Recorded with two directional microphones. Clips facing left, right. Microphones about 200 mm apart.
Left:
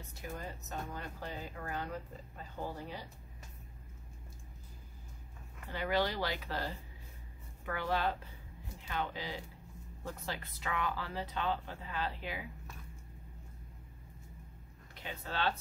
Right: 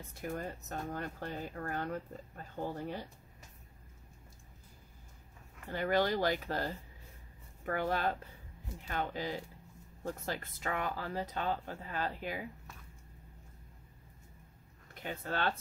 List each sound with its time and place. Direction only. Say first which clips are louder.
0.1 s speech: right 5 dB; 50° right (ahead or behind)
5.7 s speech: right 3 dB; 45° right (ahead or behind)
15.0 s speech: right 2 dB; 50° right (ahead or behind)